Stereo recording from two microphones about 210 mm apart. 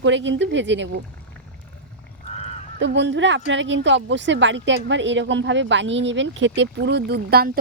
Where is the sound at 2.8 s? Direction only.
55° right (ahead or behind).